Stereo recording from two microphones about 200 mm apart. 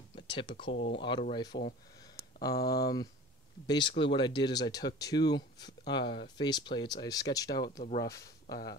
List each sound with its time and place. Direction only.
0.1 s speech: 25° left (ahead or behind)
2.5 s speech: 50° left (ahead or behind)
3.6 s speech: 25° left (ahead or behind)